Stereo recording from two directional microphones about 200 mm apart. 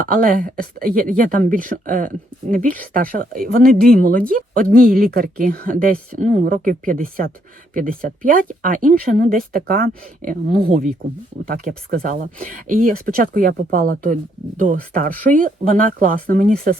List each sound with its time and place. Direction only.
0.0 s speech: 45° right (ahead or behind)